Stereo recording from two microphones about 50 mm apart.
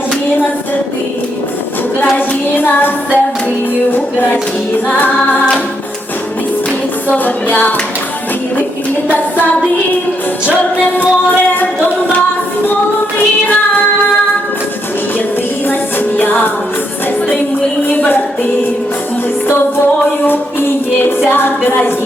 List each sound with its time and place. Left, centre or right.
2.1 s music: left
4.9 s music: left
7.1 s music: left
10.4 s music: left
13.1 s music: left
15.6 s music: left
17.8 s music: left
20.2 s music: left
21.3 s a woman's voice: left